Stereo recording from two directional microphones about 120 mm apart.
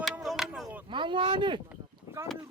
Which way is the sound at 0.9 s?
40° right (ahead or behind).